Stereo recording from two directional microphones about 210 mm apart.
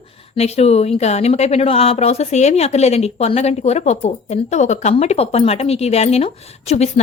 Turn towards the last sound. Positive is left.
turn(degrees=30)  # may be behind; listen again after turning